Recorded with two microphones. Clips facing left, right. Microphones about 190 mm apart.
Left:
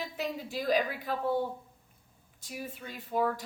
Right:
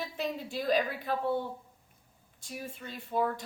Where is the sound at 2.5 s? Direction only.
10° left (ahead or behind).